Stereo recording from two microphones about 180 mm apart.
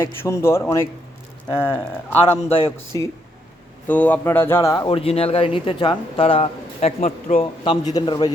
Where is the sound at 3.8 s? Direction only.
10° left (ahead or behind).